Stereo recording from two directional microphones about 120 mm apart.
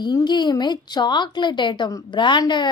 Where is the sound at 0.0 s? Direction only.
35° left (ahead or behind).